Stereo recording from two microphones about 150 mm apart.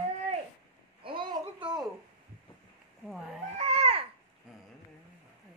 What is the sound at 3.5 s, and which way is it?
Babbling, 45° right (ahead or behind).